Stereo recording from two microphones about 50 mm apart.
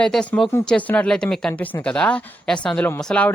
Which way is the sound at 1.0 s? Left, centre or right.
Centre.